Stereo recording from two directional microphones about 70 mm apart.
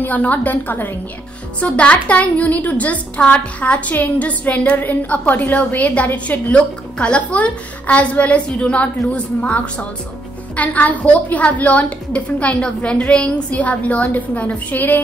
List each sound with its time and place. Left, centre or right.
0.0 s a woman's voice: left